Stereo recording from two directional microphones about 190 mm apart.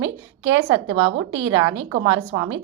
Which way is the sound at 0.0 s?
90° right.